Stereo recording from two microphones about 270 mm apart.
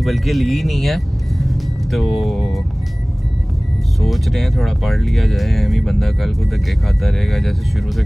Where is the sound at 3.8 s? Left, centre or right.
Centre.